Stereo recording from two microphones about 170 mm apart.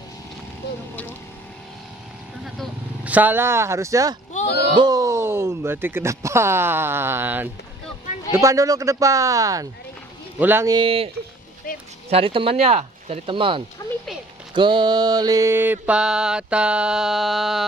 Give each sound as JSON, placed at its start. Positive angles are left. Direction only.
{"t": 2.4, "sound": "vehicle", "side_deg": -5}
{"t": 4.6, "sound": "a man's voice", "side_deg": -25}
{"t": 10.7, "sound": "speech", "side_deg": -30}
{"t": 12.1, "sound": "speech", "side_deg": -30}
{"t": 14.5, "sound": "mantra", "side_deg": -25}